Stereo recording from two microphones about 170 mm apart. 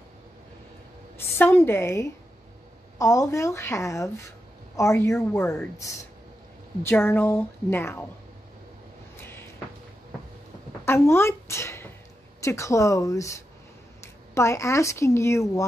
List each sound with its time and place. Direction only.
1.1 s a woman's voice: 15° left (ahead or behind)
10.9 s a woman's voice: 15° left (ahead or behind)